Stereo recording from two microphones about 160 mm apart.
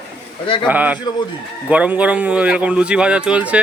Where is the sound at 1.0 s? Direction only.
25° left (ahead or behind).